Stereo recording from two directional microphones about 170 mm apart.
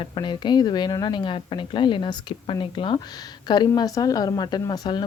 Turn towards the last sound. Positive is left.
turn(degrees=25)  # may be behind; listen again after turning